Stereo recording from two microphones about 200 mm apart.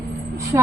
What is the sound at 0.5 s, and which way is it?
Speech, 15° right (ahead or behind).